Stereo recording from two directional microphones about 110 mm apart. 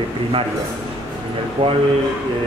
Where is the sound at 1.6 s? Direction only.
55° right (ahead or behind).